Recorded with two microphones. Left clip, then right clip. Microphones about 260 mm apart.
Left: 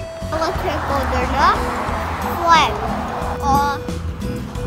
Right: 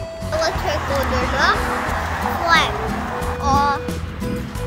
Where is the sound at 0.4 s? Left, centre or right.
Left.